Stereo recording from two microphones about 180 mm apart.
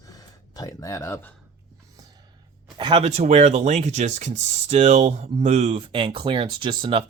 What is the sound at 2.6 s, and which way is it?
Speech, 25° right (ahead or behind).